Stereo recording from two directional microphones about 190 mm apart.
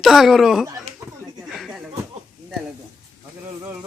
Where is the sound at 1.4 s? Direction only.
Centre (ahead or behind).